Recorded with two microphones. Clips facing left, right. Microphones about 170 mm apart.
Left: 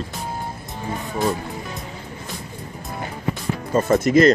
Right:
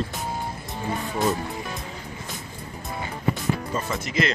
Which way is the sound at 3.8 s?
45° left (ahead or behind).